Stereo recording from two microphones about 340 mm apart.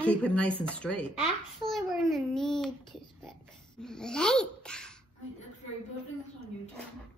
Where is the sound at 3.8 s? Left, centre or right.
Centre.